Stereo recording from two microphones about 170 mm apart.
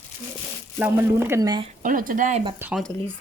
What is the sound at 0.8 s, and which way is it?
Speech, 10° right (ahead or behind).